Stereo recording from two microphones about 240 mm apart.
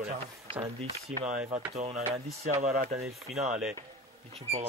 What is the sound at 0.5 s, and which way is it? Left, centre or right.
Speech, right.